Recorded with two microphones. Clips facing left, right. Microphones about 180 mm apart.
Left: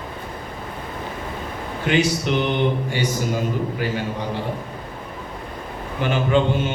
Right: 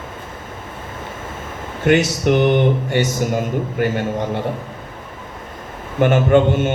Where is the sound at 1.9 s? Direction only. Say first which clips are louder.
Right 5 dB; 50° right (ahead or behind).